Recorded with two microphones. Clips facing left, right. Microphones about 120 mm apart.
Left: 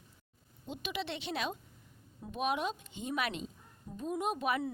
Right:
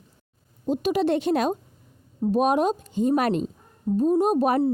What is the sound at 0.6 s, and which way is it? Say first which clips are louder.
A woman's voice: right 17 dB; 40° right (ahead or behind).